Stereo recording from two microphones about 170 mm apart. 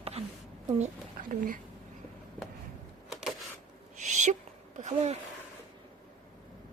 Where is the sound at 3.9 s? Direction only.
45° right (ahead or behind).